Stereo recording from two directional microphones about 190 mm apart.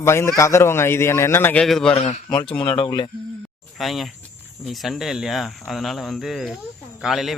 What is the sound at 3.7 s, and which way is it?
Speech, centre (ahead or behind).